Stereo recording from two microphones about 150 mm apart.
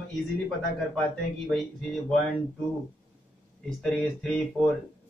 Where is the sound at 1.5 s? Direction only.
5° left (ahead or behind).